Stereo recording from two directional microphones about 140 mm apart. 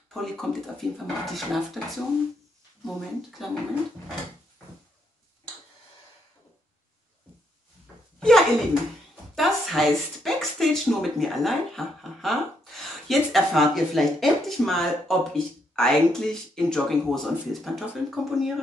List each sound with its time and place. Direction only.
0.1 s speech: centre (ahead or behind)
8.2 s a sound: 5° left (ahead or behind)
9.3 s speech: centre (ahead or behind)